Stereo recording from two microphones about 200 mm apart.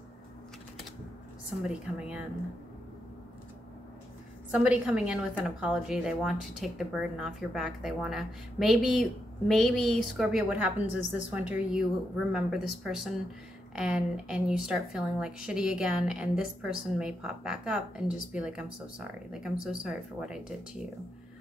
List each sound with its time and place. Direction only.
1.6 s a woman's voice: 5° right (ahead or behind)
4.5 s a woman's voice: 5° right (ahead or behind)